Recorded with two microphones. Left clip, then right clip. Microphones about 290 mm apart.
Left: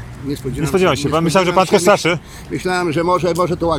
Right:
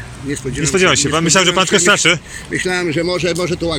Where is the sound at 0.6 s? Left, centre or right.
Centre.